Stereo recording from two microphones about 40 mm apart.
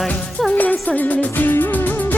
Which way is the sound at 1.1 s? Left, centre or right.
Left.